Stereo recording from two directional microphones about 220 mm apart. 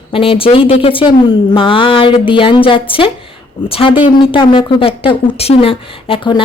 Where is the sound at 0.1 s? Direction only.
25° left (ahead or behind).